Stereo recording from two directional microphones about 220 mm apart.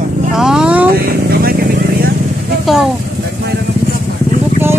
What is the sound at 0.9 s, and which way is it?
Speech, 45° right (ahead or behind).